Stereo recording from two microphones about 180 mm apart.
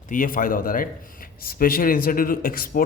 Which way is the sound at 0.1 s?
50° left (ahead or behind).